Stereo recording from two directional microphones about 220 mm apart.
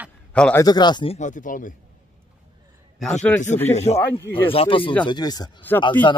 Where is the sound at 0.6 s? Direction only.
20° left (ahead or behind); by 1.7 s 35° left (ahead or behind).